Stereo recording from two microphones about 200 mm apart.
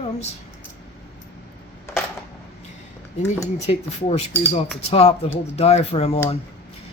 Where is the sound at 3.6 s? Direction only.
35° left (ahead or behind).